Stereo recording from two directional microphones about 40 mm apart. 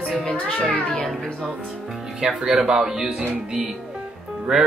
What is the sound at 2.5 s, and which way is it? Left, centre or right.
Speech, centre.